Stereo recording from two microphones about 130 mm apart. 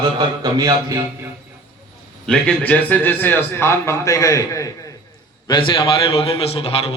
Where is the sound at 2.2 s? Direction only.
5° left (ahead or behind); by 4.7 s 25° left (ahead or behind).